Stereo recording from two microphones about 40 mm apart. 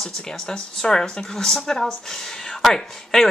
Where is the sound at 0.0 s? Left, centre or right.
Centre.